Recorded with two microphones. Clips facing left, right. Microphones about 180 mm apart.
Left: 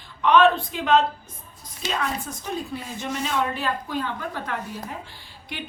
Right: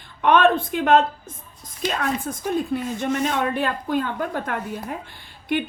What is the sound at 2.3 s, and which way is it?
A woman's voice, 50° right (ahead or behind).